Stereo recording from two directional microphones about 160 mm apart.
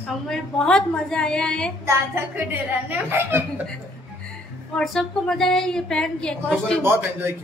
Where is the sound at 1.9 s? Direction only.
15° right (ahead or behind).